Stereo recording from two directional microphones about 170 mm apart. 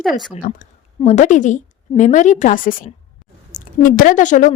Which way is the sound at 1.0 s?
45° left (ahead or behind).